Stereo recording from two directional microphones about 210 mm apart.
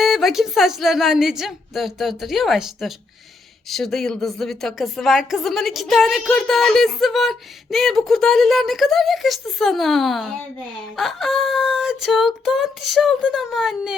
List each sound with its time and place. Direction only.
0.0 s a woman's voice: centre (ahead or behind)